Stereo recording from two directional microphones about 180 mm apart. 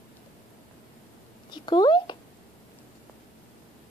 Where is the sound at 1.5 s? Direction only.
25° left (ahead or behind).